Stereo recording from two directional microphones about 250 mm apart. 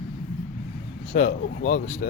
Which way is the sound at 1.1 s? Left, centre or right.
Left.